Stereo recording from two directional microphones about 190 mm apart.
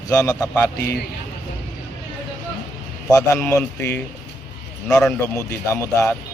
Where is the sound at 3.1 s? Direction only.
10° left (ahead or behind).